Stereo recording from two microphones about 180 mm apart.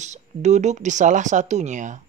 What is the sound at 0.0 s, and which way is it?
Speech, 40° right (ahead or behind).